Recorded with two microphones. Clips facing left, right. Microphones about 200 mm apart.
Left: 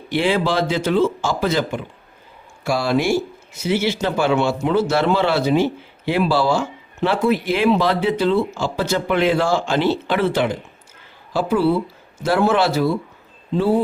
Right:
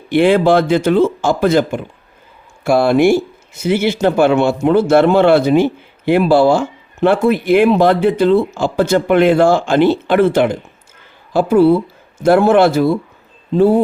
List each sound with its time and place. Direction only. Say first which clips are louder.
0.1 s speech: right 8 dB; 55° right (ahead or behind)